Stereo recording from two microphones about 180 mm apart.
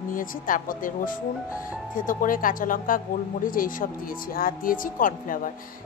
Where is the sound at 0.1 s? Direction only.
50° left (ahead or behind).